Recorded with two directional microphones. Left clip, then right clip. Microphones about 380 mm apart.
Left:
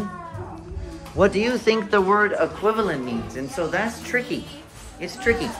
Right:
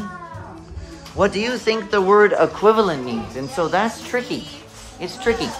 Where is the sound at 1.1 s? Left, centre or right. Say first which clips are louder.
Even; centre.